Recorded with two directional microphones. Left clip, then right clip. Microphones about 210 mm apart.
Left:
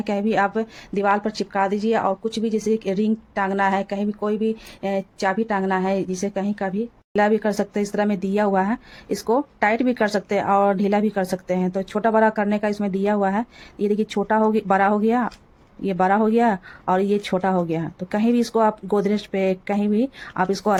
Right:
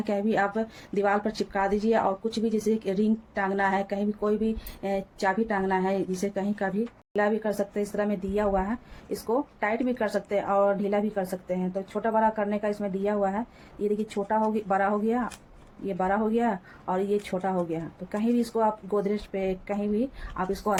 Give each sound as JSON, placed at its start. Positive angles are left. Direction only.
{"t": 0.0, "sound": "a woman's voice", "side_deg": 35}
{"t": 7.1, "sound": "speech", "side_deg": 50}